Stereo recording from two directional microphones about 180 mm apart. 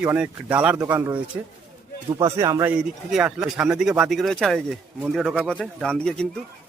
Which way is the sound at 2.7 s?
5° right (ahead or behind).